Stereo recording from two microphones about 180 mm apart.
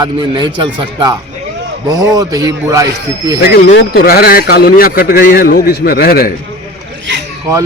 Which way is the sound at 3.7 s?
65° left (ahead or behind).